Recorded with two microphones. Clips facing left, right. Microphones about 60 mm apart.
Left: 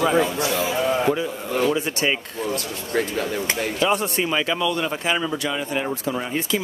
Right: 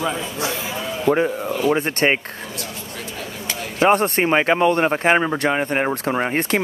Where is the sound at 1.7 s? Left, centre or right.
Right.